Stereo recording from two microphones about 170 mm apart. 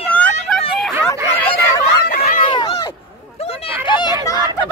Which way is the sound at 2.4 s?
30° left (ahead or behind).